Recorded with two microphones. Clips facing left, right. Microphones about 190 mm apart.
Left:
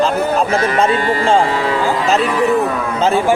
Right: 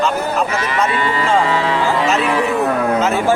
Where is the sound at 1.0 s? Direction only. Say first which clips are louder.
Left 2 dB; 45° left (ahead or behind).